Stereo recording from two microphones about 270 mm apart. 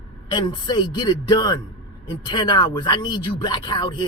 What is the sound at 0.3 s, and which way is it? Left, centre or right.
Speech, centre.